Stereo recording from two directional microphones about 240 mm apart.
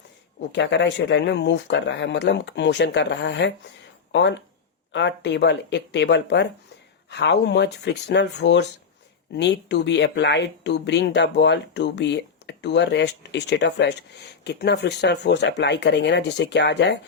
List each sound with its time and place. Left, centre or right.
0.5 s speech: left